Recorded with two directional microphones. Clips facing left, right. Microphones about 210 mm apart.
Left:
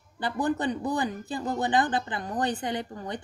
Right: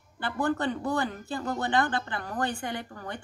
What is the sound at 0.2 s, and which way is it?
Speech, 20° left (ahead or behind).